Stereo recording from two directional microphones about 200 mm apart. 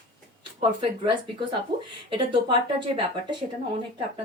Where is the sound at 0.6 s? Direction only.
25° right (ahead or behind).